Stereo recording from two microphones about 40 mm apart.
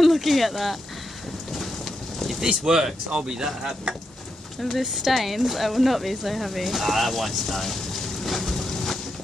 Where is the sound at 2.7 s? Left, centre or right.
Centre.